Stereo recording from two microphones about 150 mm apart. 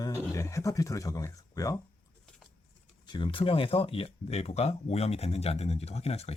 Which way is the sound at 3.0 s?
30° left (ahead or behind).